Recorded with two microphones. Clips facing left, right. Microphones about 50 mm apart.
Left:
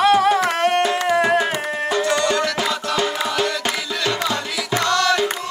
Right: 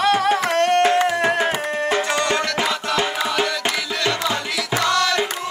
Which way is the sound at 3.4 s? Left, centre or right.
Centre.